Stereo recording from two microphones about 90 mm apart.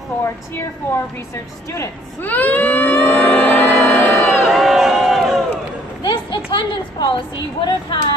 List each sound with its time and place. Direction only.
0.6 s a woman's voice: 30° left (ahead or behind)
2.2 s a sound: 20° left (ahead or behind)
4.1 s music: 25° left (ahead or behind)
4.5 s crowd: centre (ahead or behind)
6.0 s a sound: 65° left (ahead or behind)
7.6 s speech: 55° left (ahead or behind)